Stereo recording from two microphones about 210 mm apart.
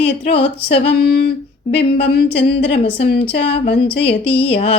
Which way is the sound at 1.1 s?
50° left (ahead or behind).